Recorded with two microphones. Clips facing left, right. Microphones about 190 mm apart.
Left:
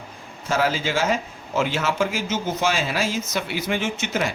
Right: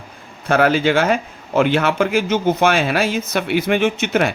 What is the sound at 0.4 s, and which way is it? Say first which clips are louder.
A man's voice: right 8 dB; 60° right (ahead or behind).